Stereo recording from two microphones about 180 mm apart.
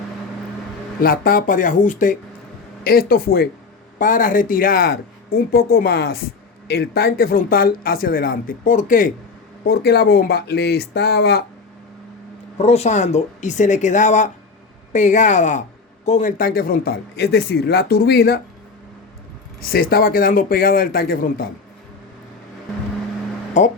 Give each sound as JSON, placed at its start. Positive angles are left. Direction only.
{"t": 1.0, "sound": "speech", "side_deg": 50}
{"t": 9.6, "sound": "speech", "side_deg": 60}
{"t": 12.6, "sound": "speech", "side_deg": 35}
{"t": 19.7, "sound": "speech", "side_deg": 55}
{"t": 23.6, "sound": "speech", "side_deg": 40}